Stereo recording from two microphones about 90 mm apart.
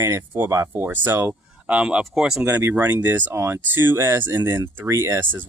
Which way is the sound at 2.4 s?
25° right (ahead or behind).